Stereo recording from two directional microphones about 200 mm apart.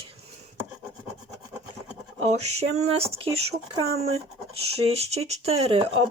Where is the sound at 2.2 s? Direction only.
35° right (ahead or behind).